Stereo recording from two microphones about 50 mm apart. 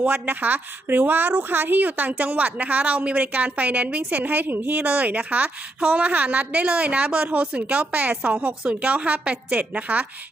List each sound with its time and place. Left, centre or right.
0.0 s a woman's voice: right